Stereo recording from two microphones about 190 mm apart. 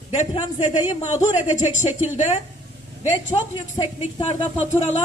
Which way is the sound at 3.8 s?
25° left (ahead or behind).